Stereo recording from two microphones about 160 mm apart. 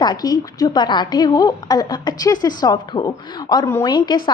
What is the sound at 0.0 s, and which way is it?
A woman's voice, 25° left (ahead or behind).